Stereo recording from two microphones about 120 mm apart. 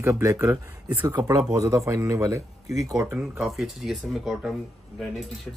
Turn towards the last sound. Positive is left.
turn(degrees=0)  # may be behind; listen again after turning